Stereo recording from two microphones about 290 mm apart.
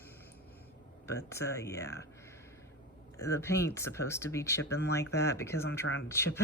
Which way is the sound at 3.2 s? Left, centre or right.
Centre.